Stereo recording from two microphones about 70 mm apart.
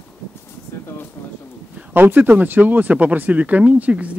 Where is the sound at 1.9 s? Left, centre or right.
Right.